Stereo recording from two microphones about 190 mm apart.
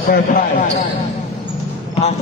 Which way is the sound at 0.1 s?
45° left (ahead or behind).